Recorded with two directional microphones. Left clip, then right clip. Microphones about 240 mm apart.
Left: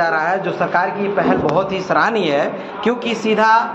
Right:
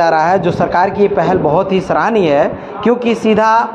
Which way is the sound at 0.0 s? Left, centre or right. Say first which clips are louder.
Right 6 dB; right.